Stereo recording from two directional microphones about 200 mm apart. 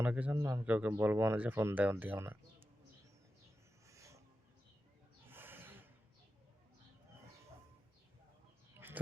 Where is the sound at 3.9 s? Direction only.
15° right (ahead or behind).